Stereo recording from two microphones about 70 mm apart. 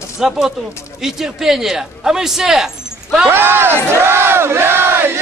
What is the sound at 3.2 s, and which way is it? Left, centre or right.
Battle cry, right.